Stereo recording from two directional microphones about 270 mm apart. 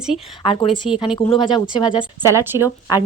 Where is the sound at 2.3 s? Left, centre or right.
Centre.